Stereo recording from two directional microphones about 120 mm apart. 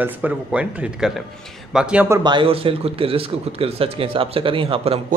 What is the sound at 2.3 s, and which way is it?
Speech, 45° right (ahead or behind).